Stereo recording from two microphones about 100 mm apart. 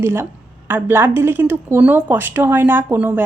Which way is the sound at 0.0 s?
25° right (ahead or behind).